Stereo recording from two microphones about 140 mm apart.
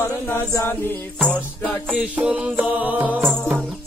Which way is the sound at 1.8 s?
10° right (ahead or behind).